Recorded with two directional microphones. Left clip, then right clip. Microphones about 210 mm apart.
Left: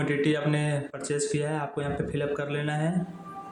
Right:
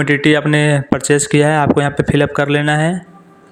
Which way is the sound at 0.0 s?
45° right (ahead or behind).